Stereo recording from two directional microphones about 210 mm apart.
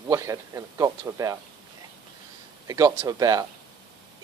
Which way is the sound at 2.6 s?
15° right (ahead or behind).